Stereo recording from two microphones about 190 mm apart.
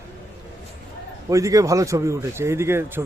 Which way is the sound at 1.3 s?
15° right (ahead or behind).